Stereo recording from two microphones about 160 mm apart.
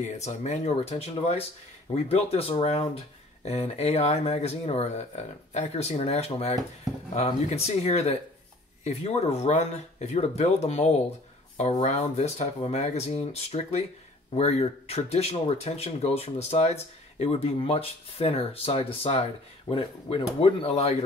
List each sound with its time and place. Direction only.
0.0 s speech: 45° left (ahead or behind)